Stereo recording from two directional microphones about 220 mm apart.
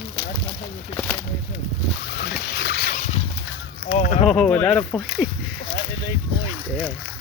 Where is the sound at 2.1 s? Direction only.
50° left (ahead or behind); by 3.2 s 30° left (ahead or behind).